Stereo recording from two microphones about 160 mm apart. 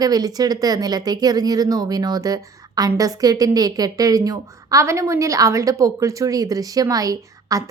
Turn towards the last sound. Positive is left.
turn(degrees=-20)  # may be behind; listen again after turning